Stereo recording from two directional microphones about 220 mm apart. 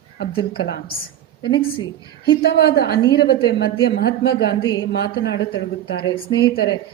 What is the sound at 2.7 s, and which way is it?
A woman's voice, 45° left (ahead or behind).